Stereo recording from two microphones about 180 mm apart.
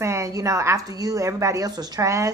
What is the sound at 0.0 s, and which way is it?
A woman's voice, 15° right (ahead or behind).